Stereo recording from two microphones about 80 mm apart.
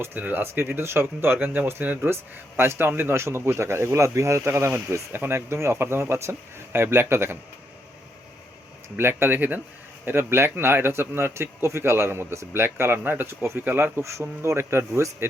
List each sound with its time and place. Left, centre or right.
0.0 s a man's voice: right
9.0 s a man's voice: right